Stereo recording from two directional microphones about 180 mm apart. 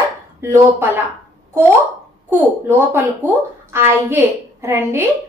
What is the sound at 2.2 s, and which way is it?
A woman's voice, 10° right (ahead or behind).